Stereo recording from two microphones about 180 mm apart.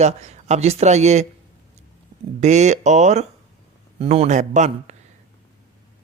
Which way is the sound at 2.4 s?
40° right (ahead or behind).